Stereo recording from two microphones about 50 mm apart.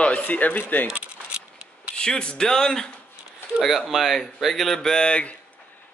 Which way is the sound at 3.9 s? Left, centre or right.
Centre.